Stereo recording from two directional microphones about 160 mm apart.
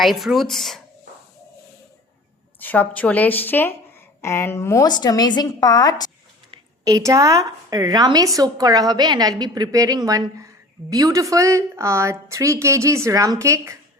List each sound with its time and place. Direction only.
0.0 s speech: centre (ahead or behind)
2.6 s a woman's voice: 10° left (ahead or behind)
6.8 s a woman's voice: 20° right (ahead or behind)